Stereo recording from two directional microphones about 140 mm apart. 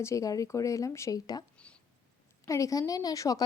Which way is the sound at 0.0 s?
20° left (ahead or behind).